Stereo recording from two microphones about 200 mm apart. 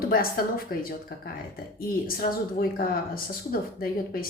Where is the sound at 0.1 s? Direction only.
50° left (ahead or behind).